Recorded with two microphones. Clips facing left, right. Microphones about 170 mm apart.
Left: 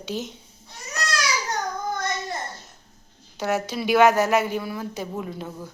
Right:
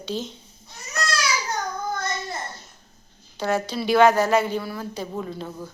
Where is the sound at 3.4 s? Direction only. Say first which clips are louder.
Right 1 dB; 15° left (ahead or behind).